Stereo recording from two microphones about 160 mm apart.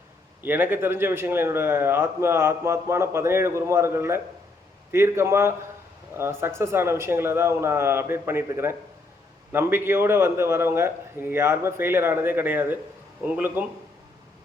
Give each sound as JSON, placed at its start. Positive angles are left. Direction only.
{"t": 0.4, "sound": "speech", "side_deg": -10}